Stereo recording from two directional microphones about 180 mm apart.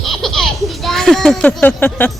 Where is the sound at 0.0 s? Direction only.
Centre (ahead or behind).